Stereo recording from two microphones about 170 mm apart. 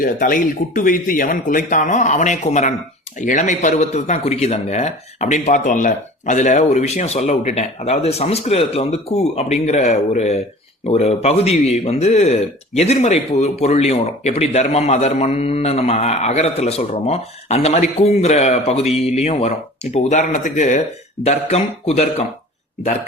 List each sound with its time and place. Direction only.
0.0 s a man's voice: 55° left (ahead or behind); by 22.3 s 40° left (ahead or behind)